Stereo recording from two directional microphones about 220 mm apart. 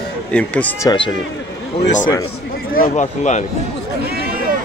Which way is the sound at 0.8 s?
20° left (ahead or behind).